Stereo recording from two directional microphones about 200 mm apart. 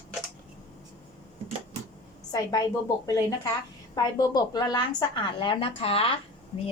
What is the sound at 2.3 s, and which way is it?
A woman's voice, 15° left (ahead or behind).